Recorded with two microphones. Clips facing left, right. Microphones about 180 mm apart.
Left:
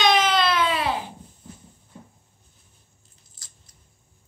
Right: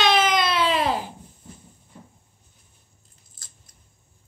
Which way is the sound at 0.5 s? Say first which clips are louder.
Right 1 dB; 30° right (ahead or behind).